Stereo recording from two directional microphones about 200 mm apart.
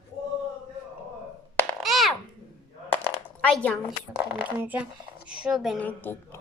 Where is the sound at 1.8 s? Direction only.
Centre (ahead or behind).